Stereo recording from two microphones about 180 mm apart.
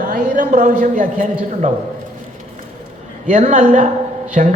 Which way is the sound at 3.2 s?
45° right (ahead or behind).